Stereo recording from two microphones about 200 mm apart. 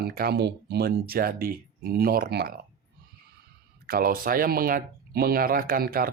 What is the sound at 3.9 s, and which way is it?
Speech, 45° right (ahead or behind).